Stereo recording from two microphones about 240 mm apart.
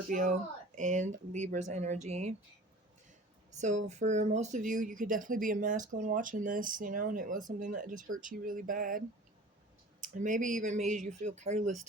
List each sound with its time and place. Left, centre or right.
0.1 s speech: right
3.6 s speech: right